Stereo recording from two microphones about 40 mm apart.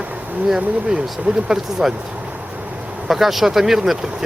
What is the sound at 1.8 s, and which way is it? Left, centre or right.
Speech, centre.